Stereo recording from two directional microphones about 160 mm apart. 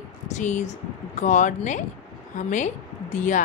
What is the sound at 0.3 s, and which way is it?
A woman's voice, 50° left (ahead or behind).